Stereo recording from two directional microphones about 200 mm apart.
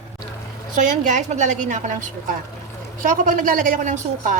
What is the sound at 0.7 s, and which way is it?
A woman's voice, 40° right (ahead or behind).